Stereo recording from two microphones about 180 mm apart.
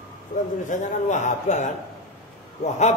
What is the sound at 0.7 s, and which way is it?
A man's voice, 40° left (ahead or behind).